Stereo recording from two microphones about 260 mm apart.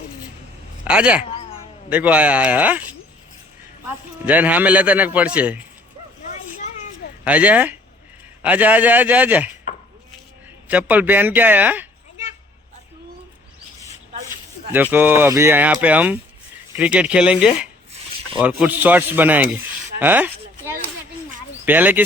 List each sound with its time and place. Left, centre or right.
0.9 s a man's voice: centre
1.2 s cat: left
1.9 s a man's voice: centre
4.3 s a man's voice: centre
7.3 s a man's voice: centre
10.7 s speech: centre
13.8 s a sound: centre
14.9 s a man's voice: centre